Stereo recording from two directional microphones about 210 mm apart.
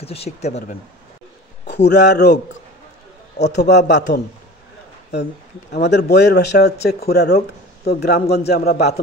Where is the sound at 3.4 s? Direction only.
55° left (ahead or behind).